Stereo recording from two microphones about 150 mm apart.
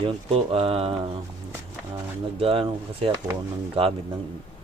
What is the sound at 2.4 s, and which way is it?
Speech, 35° right (ahead or behind).